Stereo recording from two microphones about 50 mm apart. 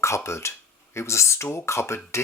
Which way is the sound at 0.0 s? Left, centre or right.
Left.